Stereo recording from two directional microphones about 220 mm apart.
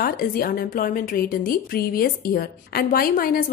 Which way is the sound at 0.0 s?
40° left (ahead or behind).